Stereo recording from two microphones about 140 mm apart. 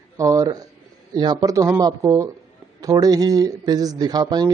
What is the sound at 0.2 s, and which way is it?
A man's voice, 25° right (ahead or behind).